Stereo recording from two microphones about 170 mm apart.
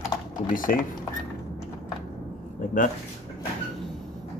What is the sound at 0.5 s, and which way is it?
Speech, 55° left (ahead or behind).